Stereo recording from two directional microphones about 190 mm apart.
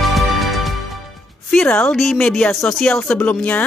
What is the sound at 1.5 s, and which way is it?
A woman's voice, 5° left (ahead or behind).